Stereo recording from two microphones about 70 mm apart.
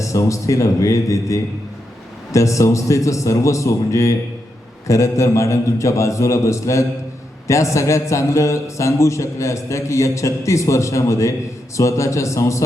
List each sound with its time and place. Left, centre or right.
0.0 s a man's voice: left